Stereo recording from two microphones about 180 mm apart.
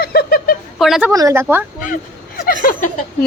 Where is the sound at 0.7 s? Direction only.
Centre (ahead or behind).